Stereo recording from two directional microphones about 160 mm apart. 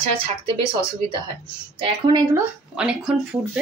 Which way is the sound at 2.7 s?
5° right (ahead or behind).